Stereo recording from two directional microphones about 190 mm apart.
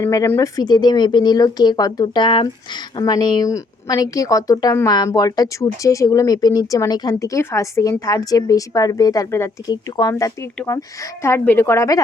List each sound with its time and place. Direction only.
0.0 s a woman's voice: 15° left (ahead or behind)